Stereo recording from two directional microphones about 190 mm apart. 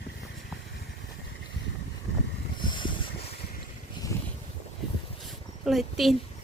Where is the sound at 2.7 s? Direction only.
25° left (ahead or behind).